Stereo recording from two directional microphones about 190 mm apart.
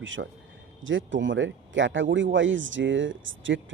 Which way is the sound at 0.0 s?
90° right.